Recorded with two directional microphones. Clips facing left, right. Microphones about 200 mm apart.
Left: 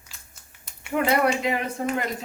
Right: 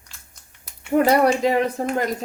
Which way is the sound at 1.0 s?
35° right (ahead or behind).